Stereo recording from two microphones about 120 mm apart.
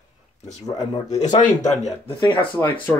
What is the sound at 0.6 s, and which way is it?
Speech, 30° left (ahead or behind).